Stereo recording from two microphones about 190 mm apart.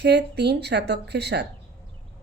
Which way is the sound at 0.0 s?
60° right (ahead or behind).